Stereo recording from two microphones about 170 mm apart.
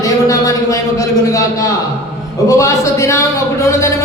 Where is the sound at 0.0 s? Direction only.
20° left (ahead or behind).